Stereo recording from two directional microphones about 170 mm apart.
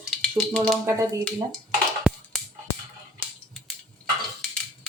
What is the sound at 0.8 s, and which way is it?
Speech, 15° right (ahead or behind).